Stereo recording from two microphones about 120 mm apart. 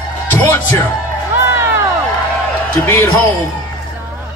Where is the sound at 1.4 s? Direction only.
20° right (ahead or behind).